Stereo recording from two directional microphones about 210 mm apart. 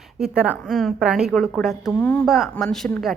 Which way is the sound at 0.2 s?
5° right (ahead or behind).